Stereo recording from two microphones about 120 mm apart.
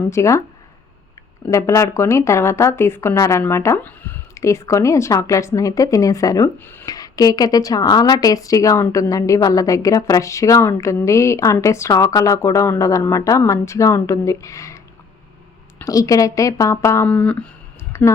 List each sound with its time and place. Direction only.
0.1 s a woman's voice: 25° left (ahead or behind)
1.5 s a woman's voice: 25° left (ahead or behind)
6.6 s speech: 15° left (ahead or behind)
6.8 s a woman's voice: 30° left (ahead or behind)
15.8 s a woman's voice: 30° left (ahead or behind)
17.1 s speech: 10° left (ahead or behind)
17.9 s speech: 20° left (ahead or behind)